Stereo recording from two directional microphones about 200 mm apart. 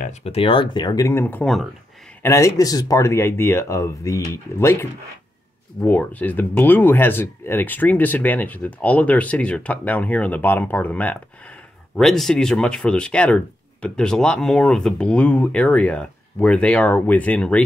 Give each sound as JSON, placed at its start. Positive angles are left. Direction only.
{"t": 0.0, "sound": "speech", "side_deg": 30}
{"t": 2.2, "sound": "speech", "side_deg": 15}
{"t": 5.8, "sound": "speech", "side_deg": 10}